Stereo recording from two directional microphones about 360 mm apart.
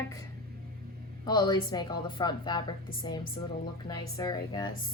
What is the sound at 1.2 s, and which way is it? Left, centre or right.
A woman's voice, centre.